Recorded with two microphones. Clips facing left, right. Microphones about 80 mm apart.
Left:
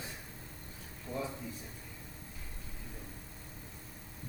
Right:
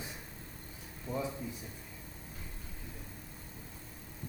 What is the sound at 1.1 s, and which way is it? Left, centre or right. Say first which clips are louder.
Speech: right 2 dB; right.